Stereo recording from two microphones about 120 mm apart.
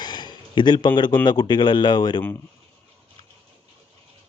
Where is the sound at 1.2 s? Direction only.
35° left (ahead or behind).